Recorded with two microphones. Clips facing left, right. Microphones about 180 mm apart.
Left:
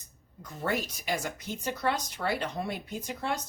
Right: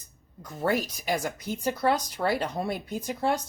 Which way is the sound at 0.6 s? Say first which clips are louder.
Right 5 dB; 35° right (ahead or behind).